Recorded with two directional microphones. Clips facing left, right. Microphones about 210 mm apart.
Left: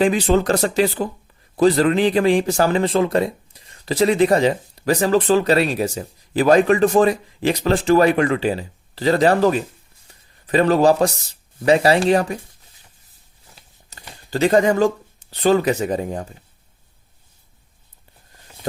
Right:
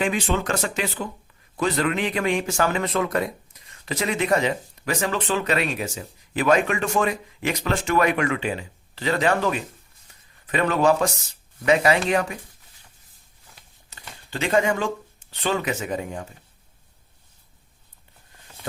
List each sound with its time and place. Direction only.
0.0 s speech: 35° left (ahead or behind)
14.3 s speech: 40° left (ahead or behind)